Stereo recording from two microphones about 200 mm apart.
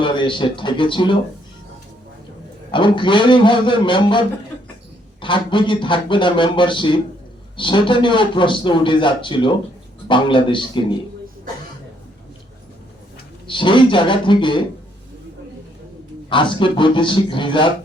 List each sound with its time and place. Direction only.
0.0 s speech: 25° left (ahead or behind)
2.7 s a man's voice: 25° left (ahead or behind)
13.5 s a man's voice: 25° left (ahead or behind)
16.3 s a man's voice: 25° left (ahead or behind)